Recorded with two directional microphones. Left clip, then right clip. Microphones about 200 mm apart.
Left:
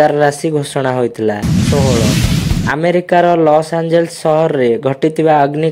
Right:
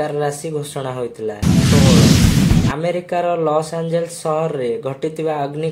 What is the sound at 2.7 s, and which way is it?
Speech, 45° left (ahead or behind).